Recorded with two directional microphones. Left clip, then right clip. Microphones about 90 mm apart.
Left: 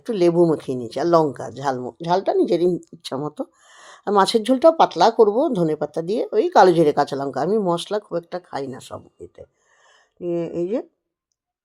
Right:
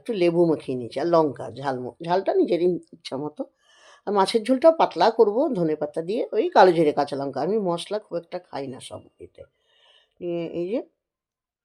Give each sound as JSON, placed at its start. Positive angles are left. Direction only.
{"t": 0.0, "sound": "speech", "side_deg": 40}